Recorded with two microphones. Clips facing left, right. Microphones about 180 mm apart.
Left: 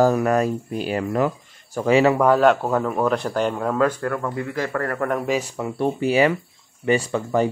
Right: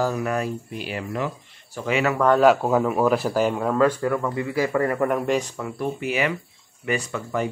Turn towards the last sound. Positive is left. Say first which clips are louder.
# left 5 dB
turn(degrees=30)  # may be behind; listen again after turning